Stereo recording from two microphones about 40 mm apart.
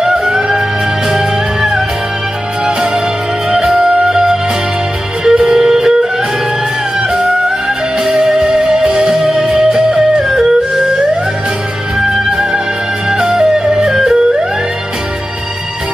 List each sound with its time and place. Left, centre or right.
0.0 s music: centre
1.1 s music: centre
7.1 s music: centre
12.0 s music: centre